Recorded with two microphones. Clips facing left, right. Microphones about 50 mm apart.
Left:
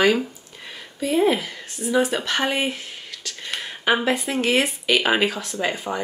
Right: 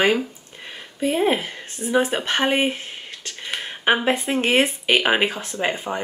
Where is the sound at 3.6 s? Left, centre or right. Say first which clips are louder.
Right 1 dB; right.